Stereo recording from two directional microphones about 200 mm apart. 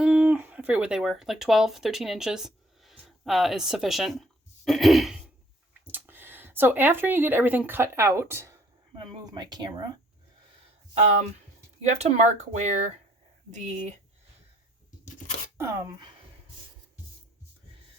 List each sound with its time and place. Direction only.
0.0 s speech: 5° right (ahead or behind)
11.9 s speech: 35° right (ahead or behind)
15.5 s speech: 15° right (ahead or behind)